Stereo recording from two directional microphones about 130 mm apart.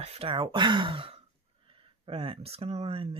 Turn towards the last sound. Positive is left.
turn(degrees=-45)  # may be behind; listen again after turning